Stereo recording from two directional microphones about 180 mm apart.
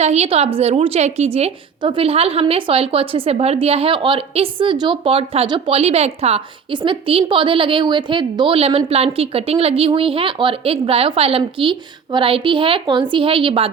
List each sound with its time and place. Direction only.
0.0 s a woman's voice: 35° right (ahead or behind)